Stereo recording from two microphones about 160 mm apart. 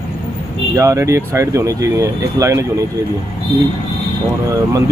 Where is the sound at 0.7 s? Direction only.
20° right (ahead or behind).